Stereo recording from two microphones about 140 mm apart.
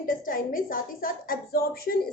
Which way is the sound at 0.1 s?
80° left.